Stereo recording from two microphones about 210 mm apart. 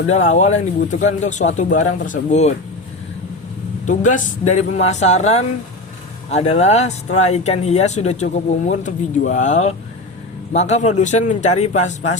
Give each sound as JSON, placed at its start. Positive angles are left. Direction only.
{"t": 0.1, "sound": "speech", "side_deg": 35}
{"t": 3.8, "sound": "speech", "side_deg": 35}